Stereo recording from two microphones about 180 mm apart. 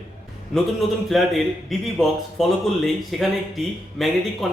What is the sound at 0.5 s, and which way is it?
Speech, centre (ahead or behind).